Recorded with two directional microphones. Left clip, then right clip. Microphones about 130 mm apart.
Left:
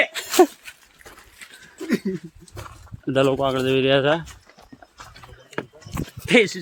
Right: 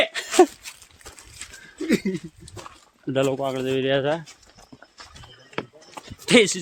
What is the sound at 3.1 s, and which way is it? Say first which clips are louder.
Speech: left 3 dB; 35° left (ahead or behind).